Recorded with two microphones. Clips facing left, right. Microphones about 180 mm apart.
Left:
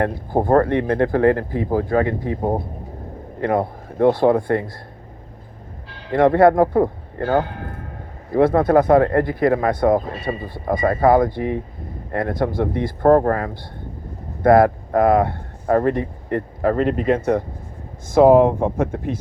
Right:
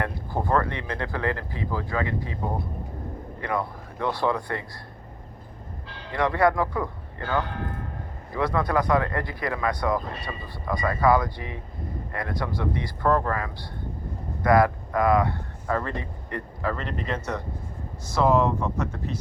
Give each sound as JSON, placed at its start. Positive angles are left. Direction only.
{"t": 0.0, "sound": "speech", "side_deg": 50}
{"t": 6.1, "sound": "speech", "side_deg": 50}